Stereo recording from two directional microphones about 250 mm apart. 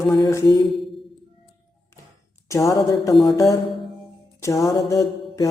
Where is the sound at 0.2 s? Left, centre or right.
Centre.